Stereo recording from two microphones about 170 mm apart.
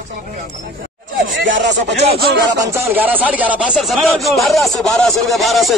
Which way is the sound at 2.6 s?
15° right (ahead or behind).